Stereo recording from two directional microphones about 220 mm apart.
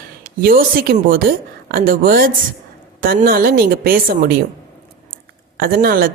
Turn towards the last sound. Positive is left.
turn(degrees=-45)  # may be behind; listen again after turning